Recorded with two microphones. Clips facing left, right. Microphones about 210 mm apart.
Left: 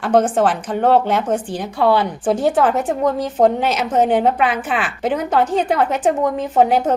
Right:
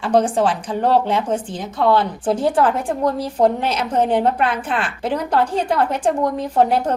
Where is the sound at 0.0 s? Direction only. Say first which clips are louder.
Left 1 dB; centre (ahead or behind).